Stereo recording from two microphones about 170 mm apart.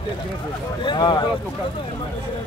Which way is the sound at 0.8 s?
25° left (ahead or behind).